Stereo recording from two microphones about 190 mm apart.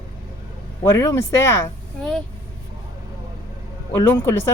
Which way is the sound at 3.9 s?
15° left (ahead or behind).